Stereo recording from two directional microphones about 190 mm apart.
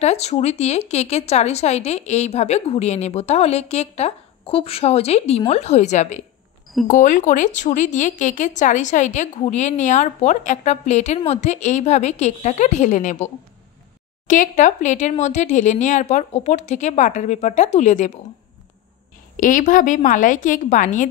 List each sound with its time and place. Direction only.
0.0 s speech: 35° left (ahead or behind)
19.3 s a woman's voice: 45° left (ahead or behind)